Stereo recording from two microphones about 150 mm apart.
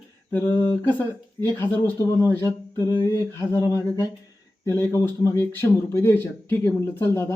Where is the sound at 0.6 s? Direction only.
10° left (ahead or behind).